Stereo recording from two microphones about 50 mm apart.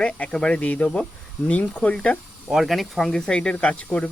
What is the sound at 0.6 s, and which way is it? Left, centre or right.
Speech, left.